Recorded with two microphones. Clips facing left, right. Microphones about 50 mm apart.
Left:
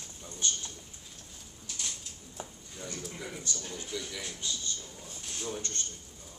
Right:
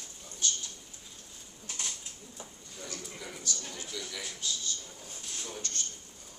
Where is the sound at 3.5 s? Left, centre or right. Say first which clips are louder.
Even; left.